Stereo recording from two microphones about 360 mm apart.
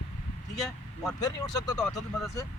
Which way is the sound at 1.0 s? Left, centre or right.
Centre.